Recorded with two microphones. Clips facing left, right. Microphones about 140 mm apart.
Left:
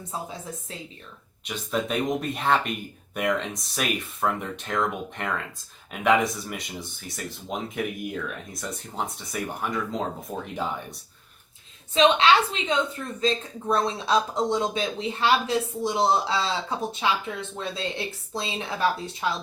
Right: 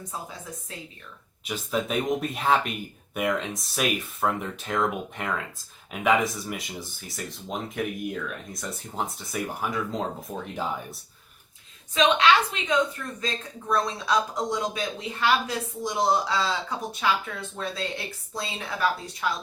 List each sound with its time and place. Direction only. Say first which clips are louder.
1.5 s speech: even; centre (ahead or behind)
11.9 s speech: left 2 dB; 30° left (ahead or behind)